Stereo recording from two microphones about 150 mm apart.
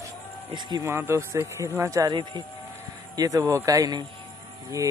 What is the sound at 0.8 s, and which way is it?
Speech, 15° right (ahead or behind).